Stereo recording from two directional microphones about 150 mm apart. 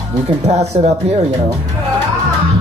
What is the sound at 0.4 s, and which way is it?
Speech, 45° right (ahead or behind).